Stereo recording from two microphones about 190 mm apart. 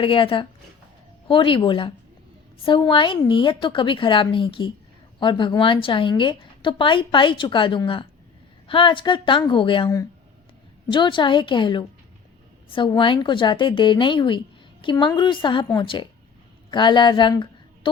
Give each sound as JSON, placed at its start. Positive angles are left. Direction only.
{"t": 0.0, "sound": "a woman's voice", "side_deg": 25}